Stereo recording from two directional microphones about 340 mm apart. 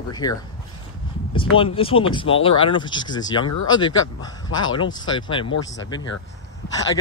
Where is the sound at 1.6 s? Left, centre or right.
Centre.